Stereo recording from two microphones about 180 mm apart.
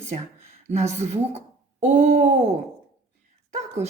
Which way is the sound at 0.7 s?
40° right (ahead or behind).